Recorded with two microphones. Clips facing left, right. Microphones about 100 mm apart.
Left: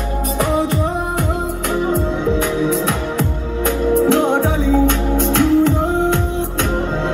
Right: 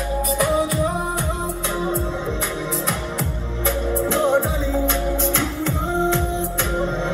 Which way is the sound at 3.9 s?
70° left (ahead or behind).